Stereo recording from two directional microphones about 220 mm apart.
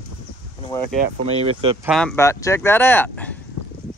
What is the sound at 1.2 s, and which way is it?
Speech, 25° right (ahead or behind).